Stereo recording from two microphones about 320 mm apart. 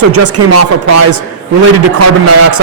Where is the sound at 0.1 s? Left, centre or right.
Right.